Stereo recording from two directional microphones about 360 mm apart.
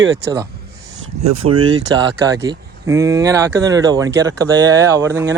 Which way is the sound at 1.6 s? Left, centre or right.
Centre.